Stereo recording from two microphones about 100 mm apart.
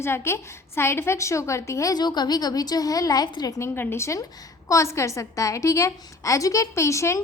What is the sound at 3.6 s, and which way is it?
A woman's voice, 25° left (ahead or behind).